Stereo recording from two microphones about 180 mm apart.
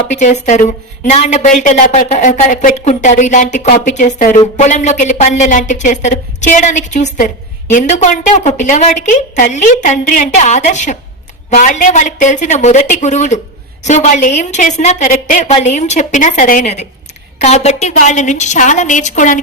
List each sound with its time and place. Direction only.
0.1 s a woman's voice: 40° left (ahead or behind)